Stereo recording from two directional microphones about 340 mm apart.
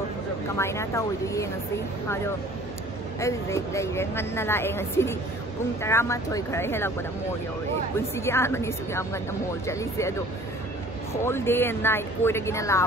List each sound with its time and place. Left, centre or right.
0.6 s speech: centre
3.2 s speech: centre
11.2 s speech: centre